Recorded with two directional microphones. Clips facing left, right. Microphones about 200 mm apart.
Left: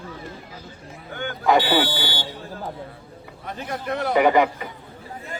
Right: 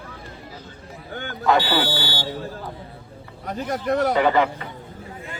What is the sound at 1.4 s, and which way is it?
Speech, 15° left (ahead or behind).